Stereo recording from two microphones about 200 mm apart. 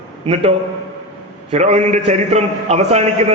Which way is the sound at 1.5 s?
35° right (ahead or behind).